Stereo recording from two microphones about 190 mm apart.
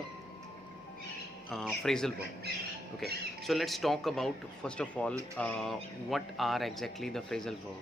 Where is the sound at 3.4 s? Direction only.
Centre (ahead or behind).